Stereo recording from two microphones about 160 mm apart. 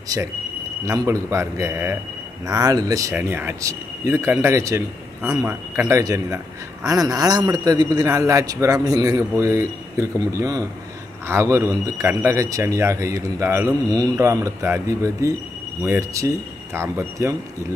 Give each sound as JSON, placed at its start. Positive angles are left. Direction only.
{"t": 0.1, "sound": "a man's voice", "side_deg": -20}